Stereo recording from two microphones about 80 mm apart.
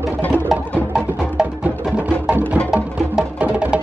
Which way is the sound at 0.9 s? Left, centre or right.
Centre.